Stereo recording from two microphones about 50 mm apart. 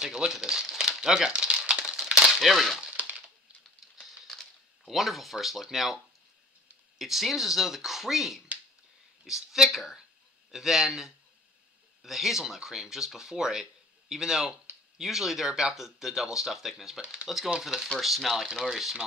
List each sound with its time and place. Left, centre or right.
0.0 s crumpling: centre
2.4 s speech: centre
3.0 s crushing: right
4.8 s speech: centre
7.0 s speech: centre